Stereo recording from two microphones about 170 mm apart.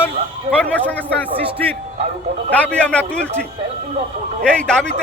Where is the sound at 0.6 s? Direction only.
5° left (ahead or behind).